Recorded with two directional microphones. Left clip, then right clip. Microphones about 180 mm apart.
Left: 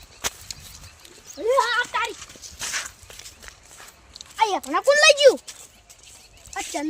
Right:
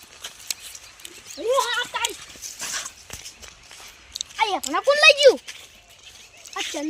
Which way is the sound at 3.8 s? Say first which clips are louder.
Right 9 dB; 5° left (ahead or behind).